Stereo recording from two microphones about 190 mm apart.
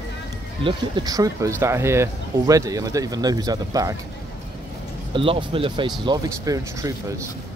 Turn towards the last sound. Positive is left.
turn(degrees=-15)  # may be behind; listen again after turning